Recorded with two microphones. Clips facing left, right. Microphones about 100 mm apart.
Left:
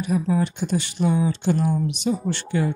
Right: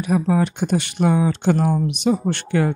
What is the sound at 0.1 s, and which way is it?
Speech, 70° right (ahead or behind).